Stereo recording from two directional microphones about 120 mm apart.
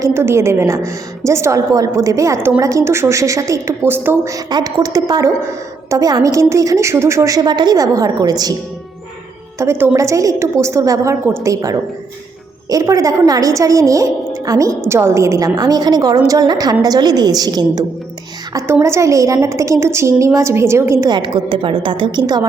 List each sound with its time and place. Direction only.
0.0 s a woman's voice: 20° right (ahead or behind)
9.6 s a woman's voice: 20° right (ahead or behind)
21.1 s a woman's voice: 40° right (ahead or behind)